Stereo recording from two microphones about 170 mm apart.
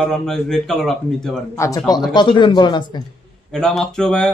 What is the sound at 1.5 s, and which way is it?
Speech, 15° left (ahead or behind).